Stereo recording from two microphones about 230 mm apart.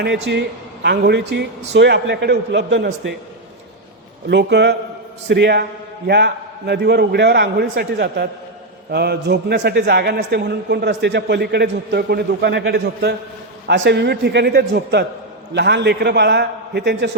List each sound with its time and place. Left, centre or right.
0.0 s a man's voice: right
4.3 s a man's voice: right